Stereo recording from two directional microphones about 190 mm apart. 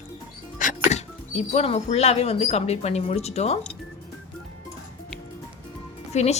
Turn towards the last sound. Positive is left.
turn(degrees=35)  # may be behind; listen again after turning